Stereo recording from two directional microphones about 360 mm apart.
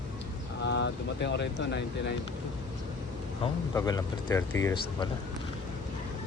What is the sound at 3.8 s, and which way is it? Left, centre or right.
Speech, centre.